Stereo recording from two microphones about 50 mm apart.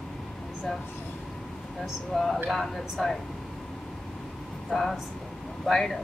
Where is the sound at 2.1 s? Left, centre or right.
Centre.